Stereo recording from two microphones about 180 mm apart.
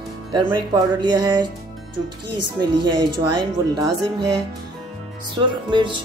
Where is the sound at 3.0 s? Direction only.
25° right (ahead or behind).